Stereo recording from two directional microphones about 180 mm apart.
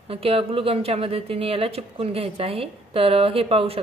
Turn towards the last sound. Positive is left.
turn(degrees=-30)  # may be behind; listen again after turning